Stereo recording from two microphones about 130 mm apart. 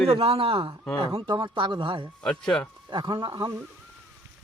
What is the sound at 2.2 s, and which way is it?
Speech, 5° left (ahead or behind).